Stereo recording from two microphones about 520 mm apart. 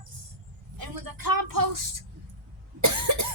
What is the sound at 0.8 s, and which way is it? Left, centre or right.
Speech, right.